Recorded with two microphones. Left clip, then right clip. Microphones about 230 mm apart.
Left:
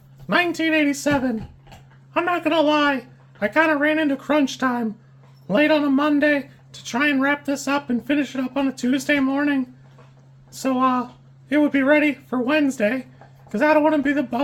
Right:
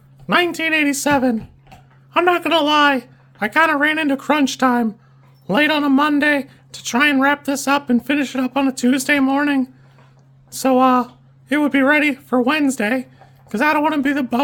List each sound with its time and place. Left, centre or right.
0.3 s speech: right